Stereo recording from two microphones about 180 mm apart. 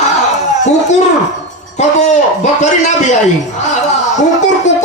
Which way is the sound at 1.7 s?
40° left (ahead or behind).